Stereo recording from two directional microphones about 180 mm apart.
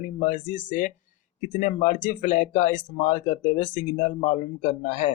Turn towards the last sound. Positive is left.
turn(degrees=40)  # may be behind; listen again after turning